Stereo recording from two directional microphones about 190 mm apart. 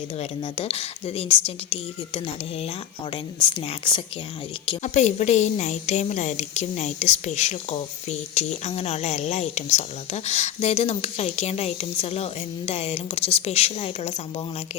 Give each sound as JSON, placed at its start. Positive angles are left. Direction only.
{"t": 0.2, "sound": "a woman's voice", "side_deg": 30}
{"t": 4.8, "sound": "a woman's voice", "side_deg": 35}